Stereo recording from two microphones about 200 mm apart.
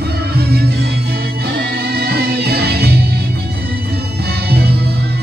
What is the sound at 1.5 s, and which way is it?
Music, 55° right (ahead or behind).